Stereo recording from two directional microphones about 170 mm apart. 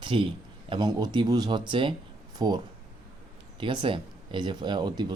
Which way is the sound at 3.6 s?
30° right (ahead or behind).